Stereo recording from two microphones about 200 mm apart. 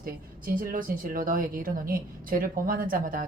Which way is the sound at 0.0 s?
45° right (ahead or behind).